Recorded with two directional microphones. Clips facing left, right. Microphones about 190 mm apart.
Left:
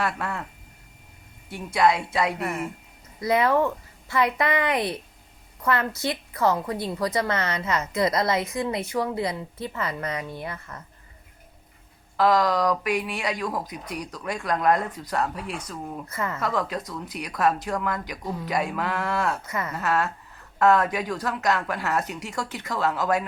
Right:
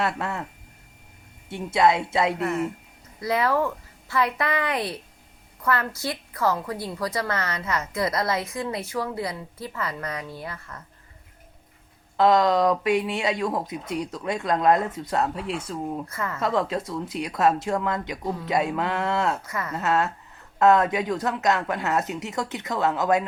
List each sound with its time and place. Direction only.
0.0 s speech: 25° right (ahead or behind)
1.5 s speech: 25° right (ahead or behind)
2.4 s a woman's voice: 15° left (ahead or behind)
12.1 s speech: 25° right (ahead or behind)
16.0 s a woman's voice: 20° left (ahead or behind)
16.4 s speech: 25° right (ahead or behind)
19.5 s a woman's voice: 20° left (ahead or behind)
19.7 s speech: 20° right (ahead or behind)